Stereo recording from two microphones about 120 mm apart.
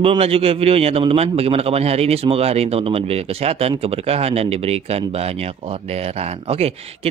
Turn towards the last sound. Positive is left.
turn(degrees=-55)  # may be behind; listen again after turning